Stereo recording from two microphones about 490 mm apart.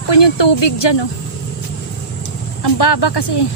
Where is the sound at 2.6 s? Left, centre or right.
Left.